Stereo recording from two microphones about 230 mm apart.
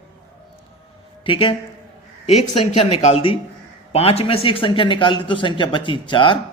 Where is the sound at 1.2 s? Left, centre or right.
Left.